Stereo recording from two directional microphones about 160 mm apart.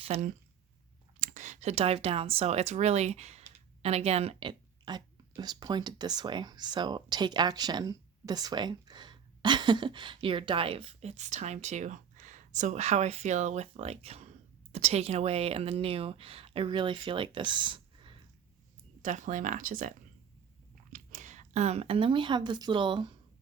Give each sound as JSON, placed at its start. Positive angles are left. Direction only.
{"t": 0.0, "sound": "a woman's voice", "side_deg": -45}
{"t": 19.0, "sound": "speech", "side_deg": -50}
{"t": 20.9, "sound": "speech", "side_deg": -50}